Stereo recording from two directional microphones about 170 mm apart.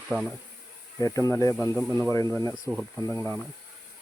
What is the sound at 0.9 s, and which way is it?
Speech, 20° left (ahead or behind).